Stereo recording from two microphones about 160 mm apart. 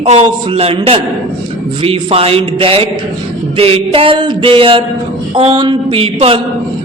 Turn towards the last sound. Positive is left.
turn(degrees=-35)  # may be behind; listen again after turning